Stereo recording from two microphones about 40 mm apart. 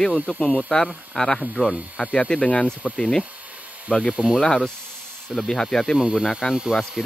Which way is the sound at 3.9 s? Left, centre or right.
Centre.